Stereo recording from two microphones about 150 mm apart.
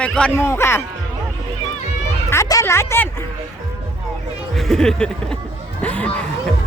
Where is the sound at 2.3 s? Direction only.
20° left (ahead or behind).